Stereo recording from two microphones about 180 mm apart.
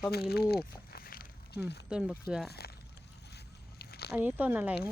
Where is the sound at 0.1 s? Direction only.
60° left (ahead or behind).